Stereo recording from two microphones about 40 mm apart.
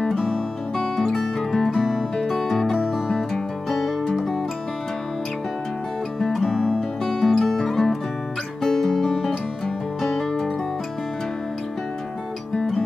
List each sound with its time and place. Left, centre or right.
0.1 s music: centre
6.3 s music: centre
6.6 s music: centre